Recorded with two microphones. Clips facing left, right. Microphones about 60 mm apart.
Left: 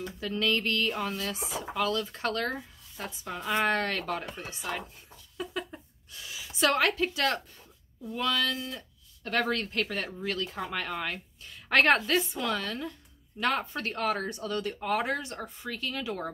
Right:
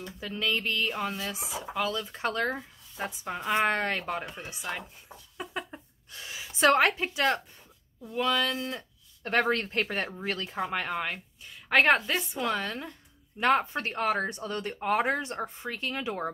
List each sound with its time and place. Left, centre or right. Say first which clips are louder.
0.2 s speech: left 2 dB; centre
5.4 s a sound: left 1 dB; right
8.1 s speech: right 2 dB; centre